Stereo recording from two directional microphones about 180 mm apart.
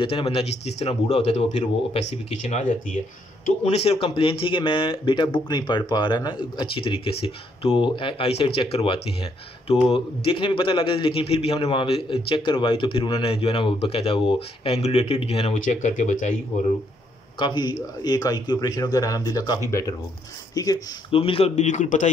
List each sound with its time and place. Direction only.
0.0 s speech: 30° left (ahead or behind)
3.6 s speech: 35° left (ahead or behind)
17.4 s speech: 25° left (ahead or behind); by 22.1 s 45° left (ahead or behind)